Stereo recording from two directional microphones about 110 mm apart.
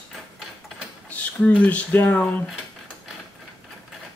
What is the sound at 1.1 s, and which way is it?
Speech, 15° left (ahead or behind).